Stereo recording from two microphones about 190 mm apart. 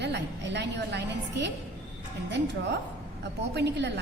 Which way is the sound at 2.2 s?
65° right (ahead or behind).